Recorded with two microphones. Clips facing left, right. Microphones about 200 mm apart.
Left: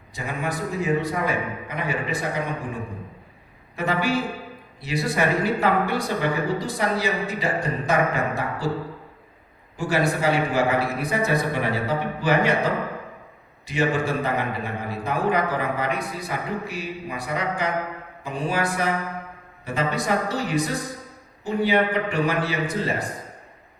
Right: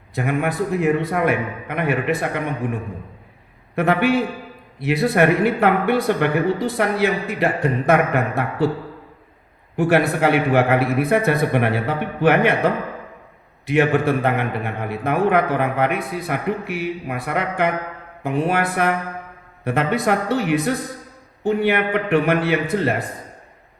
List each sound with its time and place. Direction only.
0.1 s a man's voice: 60° right (ahead or behind)
3.8 s a man's voice: 60° right (ahead or behind)
9.7 s a man's voice: 60° right (ahead or behind)